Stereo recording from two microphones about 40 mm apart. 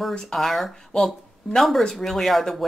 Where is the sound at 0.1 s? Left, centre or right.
Centre.